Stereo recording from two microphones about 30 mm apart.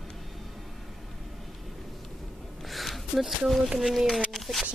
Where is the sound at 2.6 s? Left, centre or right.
Centre.